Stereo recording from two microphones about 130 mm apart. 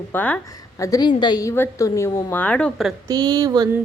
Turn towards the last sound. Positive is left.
turn(degrees=-30)  # may be behind; listen again after turning